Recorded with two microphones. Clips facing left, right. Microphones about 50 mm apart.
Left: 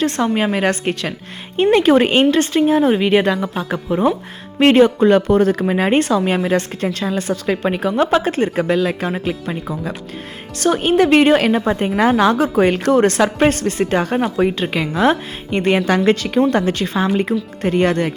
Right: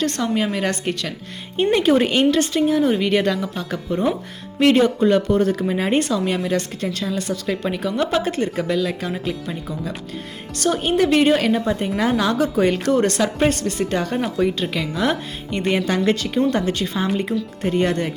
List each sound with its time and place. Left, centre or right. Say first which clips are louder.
0.2 s a woman's voice: left 4 dB; left
1.5 s speech: left 4 dB; left
2.0 s a woman's voice: left 3 dB; left
3.1 s speech: left 4 dB; left
4.6 s speech: left 4 dB; left
5.9 s a woman's voice: left 4 dB; left
15.6 s speech: left 4 dB; left
16.5 s speech: left 4 dB; left